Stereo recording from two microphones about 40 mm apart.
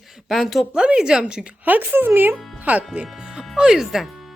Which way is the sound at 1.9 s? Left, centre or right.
Right.